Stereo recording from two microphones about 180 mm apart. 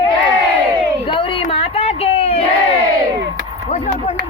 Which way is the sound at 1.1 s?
30° left (ahead or behind).